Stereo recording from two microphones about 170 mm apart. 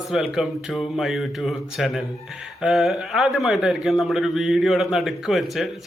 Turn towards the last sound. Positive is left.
turn(degrees=0)  # may be behind; listen again after turning